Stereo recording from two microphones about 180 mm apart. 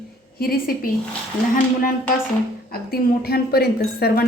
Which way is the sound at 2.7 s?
60° left (ahead or behind).